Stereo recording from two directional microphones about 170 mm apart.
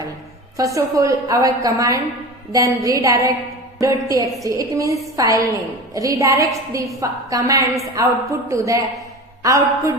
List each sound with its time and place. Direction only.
0.5 s a woman's voice: 20° right (ahead or behind)